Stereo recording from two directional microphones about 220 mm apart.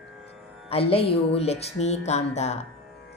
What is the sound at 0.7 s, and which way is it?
Speech, 25° left (ahead or behind).